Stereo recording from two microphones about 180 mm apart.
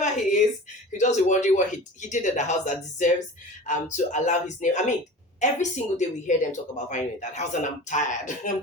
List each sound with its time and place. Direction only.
0.0 s a woman's voice: 40° left (ahead or behind)